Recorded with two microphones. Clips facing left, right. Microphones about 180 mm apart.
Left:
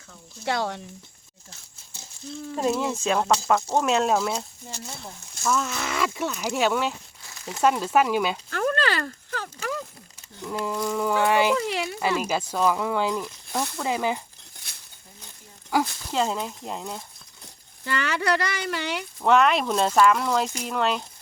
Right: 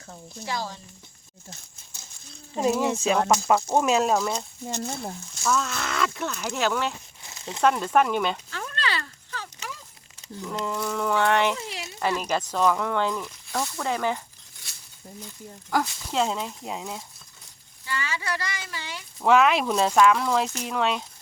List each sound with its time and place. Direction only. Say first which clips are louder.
0.4 s speech: left 5 dB; 70° left (ahead or behind)
2.6 s speech: right 2 dB; 5° right (ahead or behind)
5.5 s speech: even; 10° left (ahead or behind)
7.3 s a sound: even; 25° right (ahead or behind)
7.6 s speech: even; 5° left (ahead or behind)
8.4 s horse: left 7 dB; 50° left (ahead or behind)
10.5 s speech: left 2 dB; 10° left (ahead or behind)
11.5 s speech: left 10 dB; 65° left (ahead or behind)
11.9 s speech: right 2 dB; 5° left (ahead or behind)
15.7 s speech: left 1 dB; 5° left (ahead or behind)
17.8 s speech: left 6 dB; 65° left (ahead or behind)
19.2 s speech: even; centre (ahead or behind)